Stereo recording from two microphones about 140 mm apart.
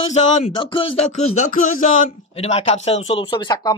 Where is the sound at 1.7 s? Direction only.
65° left (ahead or behind).